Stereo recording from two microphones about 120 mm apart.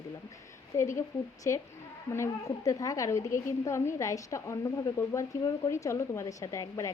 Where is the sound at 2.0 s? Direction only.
25° left (ahead or behind).